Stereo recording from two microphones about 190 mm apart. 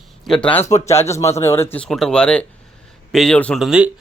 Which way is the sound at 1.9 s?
Centre (ahead or behind).